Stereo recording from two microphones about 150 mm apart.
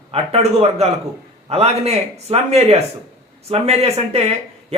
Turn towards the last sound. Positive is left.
turn(degrees=-45)  # may be behind; listen again after turning